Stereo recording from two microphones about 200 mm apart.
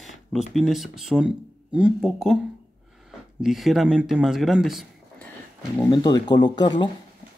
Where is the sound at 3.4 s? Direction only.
Centre (ahead or behind).